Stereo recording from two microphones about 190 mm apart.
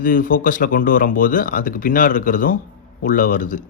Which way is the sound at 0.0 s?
45° left (ahead or behind).